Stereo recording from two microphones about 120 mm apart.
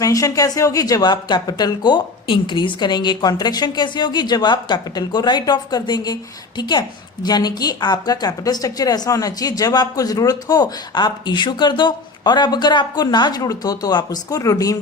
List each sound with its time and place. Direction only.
0.0 s a woman's voice: 30° left (ahead or behind)